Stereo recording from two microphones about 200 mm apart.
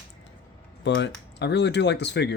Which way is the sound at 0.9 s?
60° left (ahead or behind).